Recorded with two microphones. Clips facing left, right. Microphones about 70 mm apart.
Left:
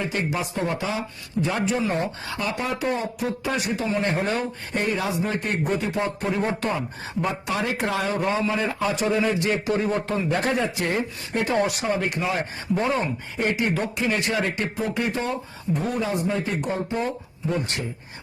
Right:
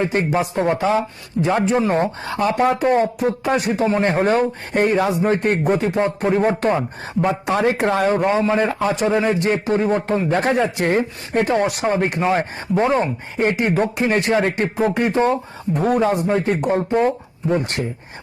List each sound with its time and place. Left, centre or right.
0.0 s a man's voice: right